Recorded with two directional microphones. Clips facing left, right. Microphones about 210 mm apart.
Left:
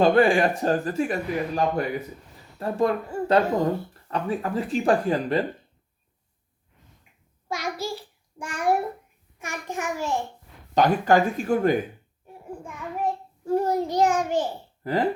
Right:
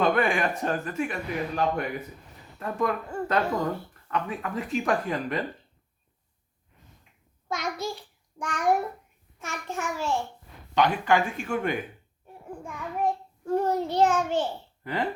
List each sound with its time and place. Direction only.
0.0 s speech: 30° left (ahead or behind)
7.4 s a child's voice: 10° left (ahead or behind)
10.8 s speech: 40° left (ahead or behind)
12.6 s a child's voice: 5° left (ahead or behind)